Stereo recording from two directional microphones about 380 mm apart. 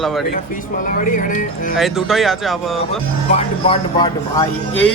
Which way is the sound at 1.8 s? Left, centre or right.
Centre.